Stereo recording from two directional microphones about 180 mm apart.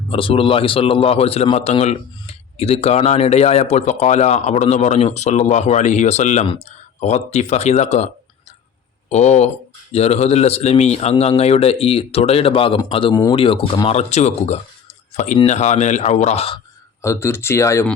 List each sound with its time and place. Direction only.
0.1 s a man's voice: 30° left (ahead or behind)
17.0 s speech: 15° left (ahead or behind)